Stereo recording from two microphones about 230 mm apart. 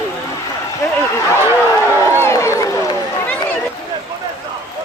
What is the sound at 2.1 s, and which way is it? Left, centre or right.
Run, centre.